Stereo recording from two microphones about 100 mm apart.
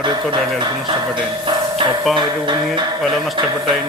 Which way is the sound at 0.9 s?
55° right (ahead or behind).